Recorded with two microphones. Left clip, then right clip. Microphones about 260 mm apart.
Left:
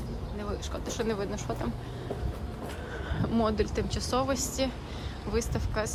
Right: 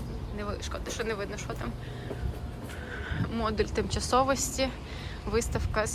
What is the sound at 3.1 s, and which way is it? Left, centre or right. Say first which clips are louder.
Speech: left 2 dB; centre.